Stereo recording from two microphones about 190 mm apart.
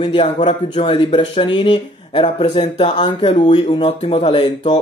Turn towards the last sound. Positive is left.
turn(degrees=30)  # may be behind; listen again after turning